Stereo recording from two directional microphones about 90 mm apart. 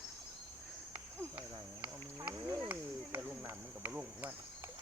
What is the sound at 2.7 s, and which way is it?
Cricket, 20° right (ahead or behind).